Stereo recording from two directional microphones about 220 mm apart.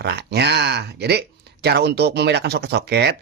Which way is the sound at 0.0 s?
50° right (ahead or behind).